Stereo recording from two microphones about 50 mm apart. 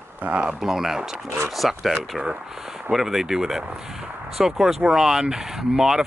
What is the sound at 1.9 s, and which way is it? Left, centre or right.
Speech, centre.